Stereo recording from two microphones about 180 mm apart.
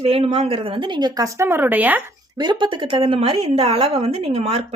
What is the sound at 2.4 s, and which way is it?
A woman's voice, 25° right (ahead or behind).